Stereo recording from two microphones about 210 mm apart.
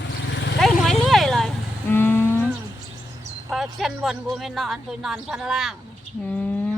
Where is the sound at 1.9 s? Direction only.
10° left (ahead or behind).